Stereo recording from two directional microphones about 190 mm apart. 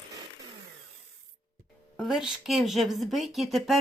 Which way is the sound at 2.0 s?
Centre (ahead or behind).